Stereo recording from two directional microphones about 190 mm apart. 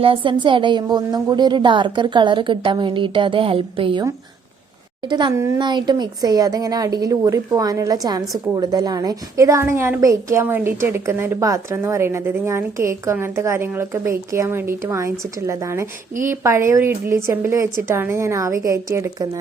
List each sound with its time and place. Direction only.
0.0 s a woman's voice: 25° right (ahead or behind)
5.0 s a woman's voice: 25° right (ahead or behind)